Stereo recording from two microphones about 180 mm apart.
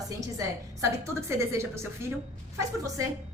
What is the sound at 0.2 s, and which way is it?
A woman's voice, 20° right (ahead or behind).